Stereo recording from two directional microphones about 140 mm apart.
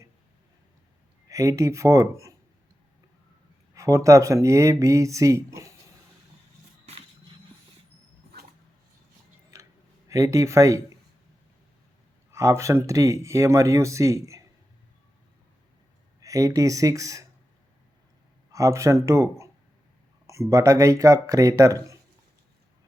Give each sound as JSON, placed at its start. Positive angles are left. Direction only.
{"t": 1.3, "sound": "speech", "side_deg": -25}
{"t": 3.8, "sound": "speech", "side_deg": -20}
{"t": 10.1, "sound": "speech", "side_deg": -20}
{"t": 12.3, "sound": "speech", "side_deg": -20}
{"t": 16.2, "sound": "speech", "side_deg": -25}
{"t": 18.5, "sound": "speech", "side_deg": -20}